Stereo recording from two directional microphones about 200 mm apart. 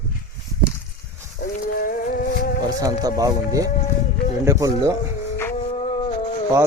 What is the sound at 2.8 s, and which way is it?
Speech, 15° right (ahead or behind).